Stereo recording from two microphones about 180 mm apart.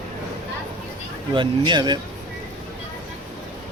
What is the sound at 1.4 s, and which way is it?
Speech, 25° right (ahead or behind).